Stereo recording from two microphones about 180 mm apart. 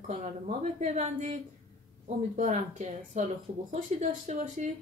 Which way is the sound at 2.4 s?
40° right (ahead or behind).